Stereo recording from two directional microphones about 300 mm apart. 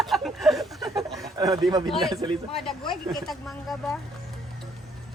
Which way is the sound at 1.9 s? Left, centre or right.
Centre.